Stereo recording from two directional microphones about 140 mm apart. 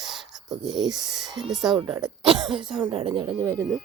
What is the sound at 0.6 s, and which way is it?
Speech, 5° right (ahead or behind).